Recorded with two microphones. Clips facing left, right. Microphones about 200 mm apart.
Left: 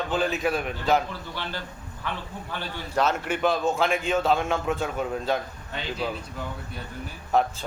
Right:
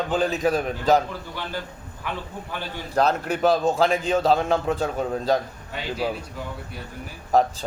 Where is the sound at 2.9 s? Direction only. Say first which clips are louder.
Right 3 dB; 35° right (ahead or behind).